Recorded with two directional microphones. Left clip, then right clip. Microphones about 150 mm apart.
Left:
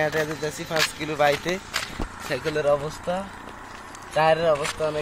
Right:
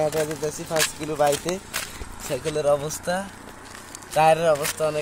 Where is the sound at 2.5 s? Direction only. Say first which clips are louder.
Right 1 dB; 15° right (ahead or behind).